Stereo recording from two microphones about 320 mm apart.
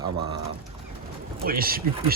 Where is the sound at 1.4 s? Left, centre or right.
Right.